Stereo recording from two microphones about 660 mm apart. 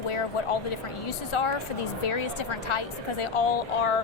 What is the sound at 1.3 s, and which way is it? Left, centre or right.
A woman's voice, left.